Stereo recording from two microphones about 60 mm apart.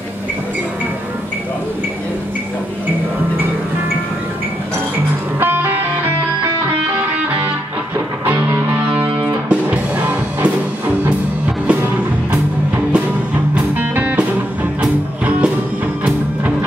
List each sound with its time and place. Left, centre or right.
5.4 s music: right
8.3 s music: right
12.9 s music: centre
13.7 s music: right
14.8 s music: centre